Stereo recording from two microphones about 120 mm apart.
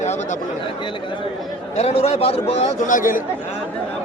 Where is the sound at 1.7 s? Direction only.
60° left (ahead or behind); by 3.2 s 90° left.